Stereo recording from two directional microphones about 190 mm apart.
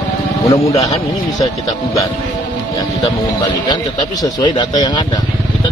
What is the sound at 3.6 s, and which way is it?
A man's voice, 20° left (ahead or behind).